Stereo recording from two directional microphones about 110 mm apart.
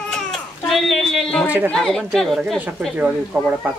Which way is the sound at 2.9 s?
10° right (ahead or behind).